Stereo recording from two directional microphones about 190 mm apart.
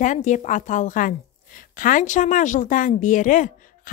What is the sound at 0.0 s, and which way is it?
A woman's voice, 40° left (ahead or behind).